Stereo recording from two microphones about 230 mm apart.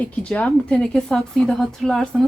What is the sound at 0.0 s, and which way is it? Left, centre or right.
A woman's voice, centre.